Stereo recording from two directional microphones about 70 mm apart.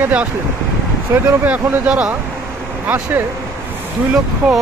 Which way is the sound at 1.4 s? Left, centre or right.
Right.